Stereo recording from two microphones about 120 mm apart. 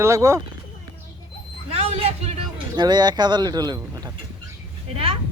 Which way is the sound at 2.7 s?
35° right (ahead or behind).